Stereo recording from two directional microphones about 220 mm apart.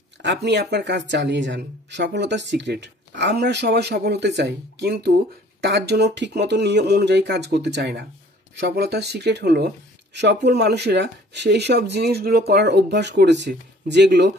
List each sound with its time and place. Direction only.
0.2 s speech: 50° right (ahead or behind)